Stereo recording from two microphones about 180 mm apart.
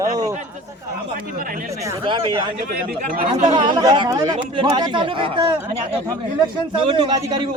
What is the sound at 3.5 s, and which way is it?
Speech, 25° right (ahead or behind).